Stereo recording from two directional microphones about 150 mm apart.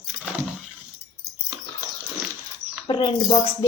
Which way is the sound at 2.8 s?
30° left (ahead or behind).